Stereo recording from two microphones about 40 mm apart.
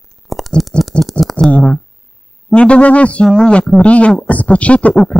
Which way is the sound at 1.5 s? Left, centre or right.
Left.